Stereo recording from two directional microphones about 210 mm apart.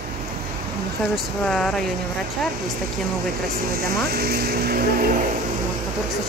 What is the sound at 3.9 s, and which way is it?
Speech, 50° right (ahead or behind).